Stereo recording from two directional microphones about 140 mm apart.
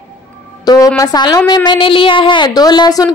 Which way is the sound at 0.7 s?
25° left (ahead or behind).